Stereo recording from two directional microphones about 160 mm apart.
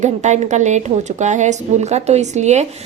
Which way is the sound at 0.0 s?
45° right (ahead or behind).